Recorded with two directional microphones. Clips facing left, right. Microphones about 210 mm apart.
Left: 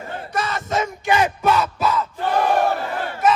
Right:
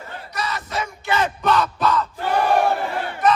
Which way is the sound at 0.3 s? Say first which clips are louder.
Left 4 dB; 50° left (ahead or behind).